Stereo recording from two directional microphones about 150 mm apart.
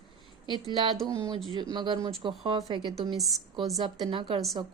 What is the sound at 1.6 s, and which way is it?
A woman's voice, 30° right (ahead or behind).